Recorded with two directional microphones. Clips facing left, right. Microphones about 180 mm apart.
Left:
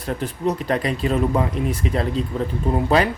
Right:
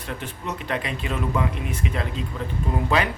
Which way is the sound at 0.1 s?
35° left (ahead or behind).